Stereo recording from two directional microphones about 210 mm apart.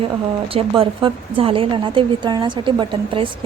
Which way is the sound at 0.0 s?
25° right (ahead or behind).